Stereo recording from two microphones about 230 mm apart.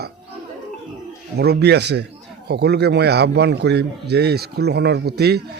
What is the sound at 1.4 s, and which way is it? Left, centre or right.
A man's voice, right.